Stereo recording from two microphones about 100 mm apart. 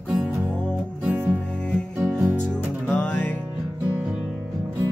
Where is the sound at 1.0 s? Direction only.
15° right (ahead or behind).